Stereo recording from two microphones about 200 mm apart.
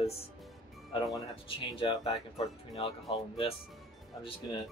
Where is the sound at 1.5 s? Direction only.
25° left (ahead or behind).